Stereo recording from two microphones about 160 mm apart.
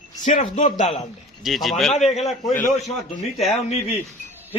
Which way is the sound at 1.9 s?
45° left (ahead or behind).